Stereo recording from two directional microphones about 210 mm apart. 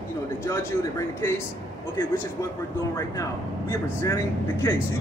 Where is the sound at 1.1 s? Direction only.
10° left (ahead or behind).